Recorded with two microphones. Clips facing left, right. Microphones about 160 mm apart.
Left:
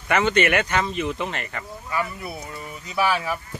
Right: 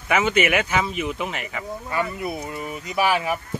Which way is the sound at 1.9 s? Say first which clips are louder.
Right 2 dB; 20° right (ahead or behind).